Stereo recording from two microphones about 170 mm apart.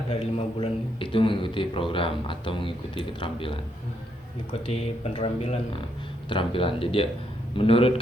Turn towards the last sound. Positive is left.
turn(degrees=35)  # may be behind; listen again after turning